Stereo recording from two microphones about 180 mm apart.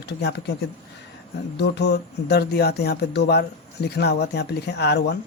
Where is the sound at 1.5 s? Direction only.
70° left (ahead or behind).